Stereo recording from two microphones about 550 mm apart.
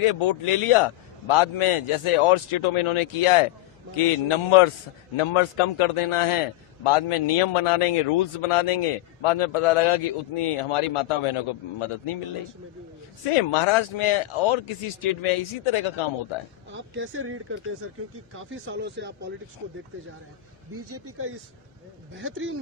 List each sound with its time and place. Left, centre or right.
0.0 s a man's voice: left
13.3 s a man's voice: left
16.7 s speech: right
20.9 s speech: right